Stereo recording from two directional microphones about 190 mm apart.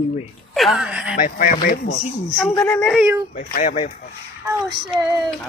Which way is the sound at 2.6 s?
5° left (ahead or behind).